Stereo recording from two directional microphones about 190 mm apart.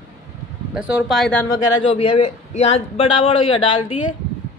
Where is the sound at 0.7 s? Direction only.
Centre (ahead or behind).